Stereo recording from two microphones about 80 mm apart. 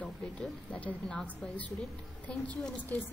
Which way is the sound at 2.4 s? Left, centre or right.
Centre.